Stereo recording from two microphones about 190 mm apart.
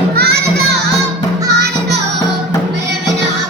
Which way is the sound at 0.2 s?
55° right (ahead or behind).